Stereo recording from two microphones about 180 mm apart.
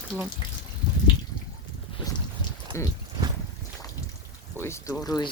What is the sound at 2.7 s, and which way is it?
Speech, 15° left (ahead or behind).